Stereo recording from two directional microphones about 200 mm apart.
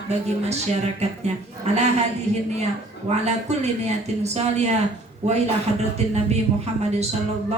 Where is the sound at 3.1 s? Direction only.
35° right (ahead or behind).